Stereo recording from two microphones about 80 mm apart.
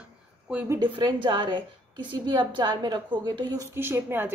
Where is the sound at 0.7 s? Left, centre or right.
Right.